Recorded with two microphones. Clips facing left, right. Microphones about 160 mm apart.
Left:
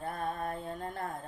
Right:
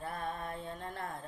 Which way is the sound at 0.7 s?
45° left (ahead or behind).